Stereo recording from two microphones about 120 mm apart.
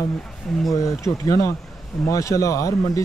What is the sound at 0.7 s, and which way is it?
Speech, 25° left (ahead or behind).